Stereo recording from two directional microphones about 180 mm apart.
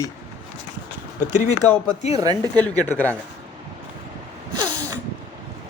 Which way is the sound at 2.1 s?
20° right (ahead or behind).